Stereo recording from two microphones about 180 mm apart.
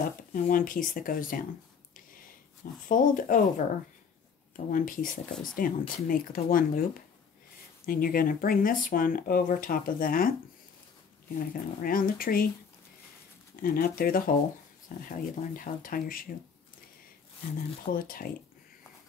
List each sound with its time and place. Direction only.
0.0 s speech: 50° left (ahead or behind)
2.9 s speech: 50° left (ahead or behind)
4.6 s speech: 50° left (ahead or behind)
7.8 s speech: 55° left (ahead or behind)
11.3 s speech: 50° left (ahead or behind)
13.6 s speech: 55° left (ahead or behind)
17.9 s speech: 55° left (ahead or behind)